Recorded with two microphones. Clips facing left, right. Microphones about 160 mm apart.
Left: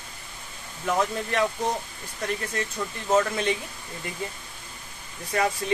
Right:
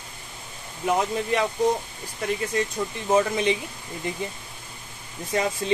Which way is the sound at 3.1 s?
15° right (ahead or behind).